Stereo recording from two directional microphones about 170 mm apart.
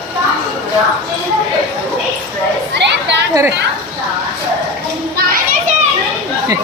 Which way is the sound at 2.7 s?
90° right.